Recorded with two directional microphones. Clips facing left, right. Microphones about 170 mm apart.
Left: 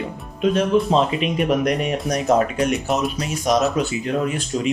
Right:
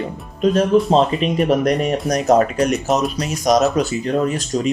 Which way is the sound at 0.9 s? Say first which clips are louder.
Right 3 dB; 35° right (ahead or behind).